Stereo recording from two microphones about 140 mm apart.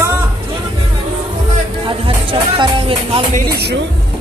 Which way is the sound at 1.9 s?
35° right (ahead or behind).